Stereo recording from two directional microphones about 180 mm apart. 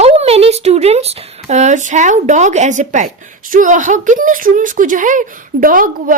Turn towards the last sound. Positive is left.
turn(degrees=-50)  # may be behind; listen again after turning